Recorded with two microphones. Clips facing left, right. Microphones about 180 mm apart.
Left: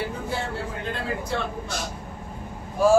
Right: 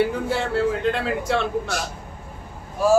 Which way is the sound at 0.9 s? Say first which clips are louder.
Right 5 dB; 80° right.